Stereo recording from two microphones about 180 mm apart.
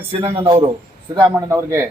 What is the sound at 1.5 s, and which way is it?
Speech, 15° right (ahead or behind).